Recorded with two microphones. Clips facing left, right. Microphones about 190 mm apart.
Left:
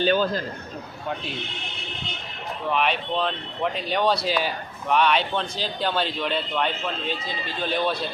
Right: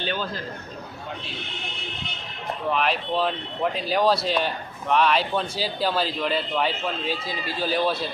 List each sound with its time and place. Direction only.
0.0 s a man's voice: 45° left (ahead or behind)
2.6 s speech: centre (ahead or behind)